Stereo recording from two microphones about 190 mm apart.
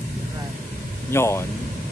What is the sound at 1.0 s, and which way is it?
Speech, 15° left (ahead or behind).